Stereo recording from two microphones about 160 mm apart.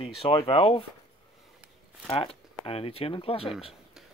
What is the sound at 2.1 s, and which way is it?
Speech, 35° left (ahead or behind).